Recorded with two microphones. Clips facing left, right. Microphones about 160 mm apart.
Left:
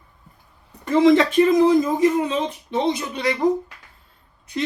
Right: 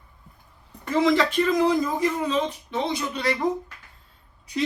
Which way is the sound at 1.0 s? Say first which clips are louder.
Left 7 dB; 25° left (ahead or behind).